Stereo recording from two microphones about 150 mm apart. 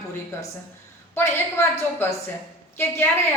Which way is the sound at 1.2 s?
15° left (ahead or behind).